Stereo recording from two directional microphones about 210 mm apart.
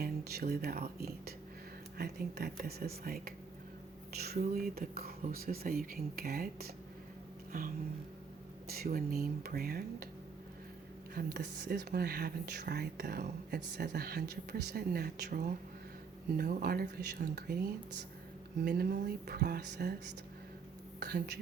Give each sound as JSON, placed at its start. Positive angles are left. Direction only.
{"t": 0.0, "sound": "speech", "side_deg": -50}
{"t": 7.5, "sound": "music", "side_deg": -40}
{"t": 8.6, "sound": "speech", "side_deg": -45}
{"t": 11.1, "sound": "speech", "side_deg": -45}
{"t": 18.6, "sound": "speech", "side_deg": -50}
{"t": 21.0, "sound": "speech", "side_deg": -50}